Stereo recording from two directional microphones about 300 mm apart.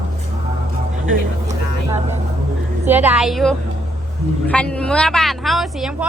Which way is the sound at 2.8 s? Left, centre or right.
Centre.